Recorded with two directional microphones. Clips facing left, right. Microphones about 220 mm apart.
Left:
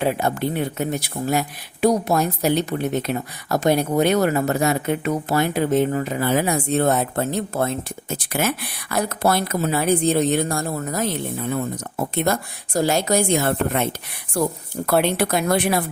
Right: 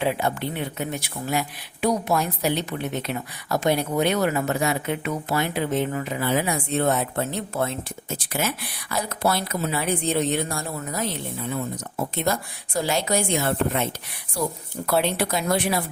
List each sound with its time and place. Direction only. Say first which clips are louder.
0.0 s speech: left 3 dB; 45° left (ahead or behind)
8.1 s speech: left 4 dB; 55° left (ahead or behind)